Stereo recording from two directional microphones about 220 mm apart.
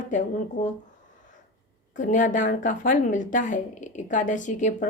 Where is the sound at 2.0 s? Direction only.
35° left (ahead or behind).